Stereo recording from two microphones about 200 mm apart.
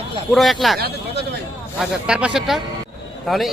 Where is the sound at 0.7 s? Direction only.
50° right (ahead or behind).